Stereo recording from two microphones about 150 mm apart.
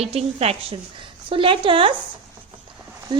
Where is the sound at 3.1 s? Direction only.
30° right (ahead or behind).